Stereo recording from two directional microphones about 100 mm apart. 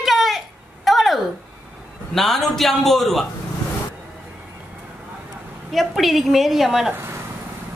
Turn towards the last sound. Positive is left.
turn(degrees=-25)  # may be behind; listen again after turning